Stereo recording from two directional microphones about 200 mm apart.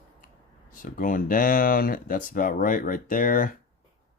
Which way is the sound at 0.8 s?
45° left (ahead or behind).